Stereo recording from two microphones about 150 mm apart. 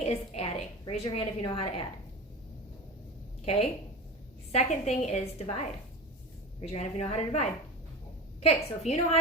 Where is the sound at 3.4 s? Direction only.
45° left (ahead or behind).